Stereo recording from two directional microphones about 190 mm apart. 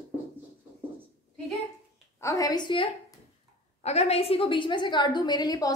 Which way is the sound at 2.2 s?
15° left (ahead or behind).